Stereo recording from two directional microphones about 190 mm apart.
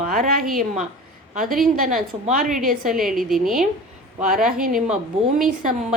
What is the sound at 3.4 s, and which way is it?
Speech, centre (ahead or behind).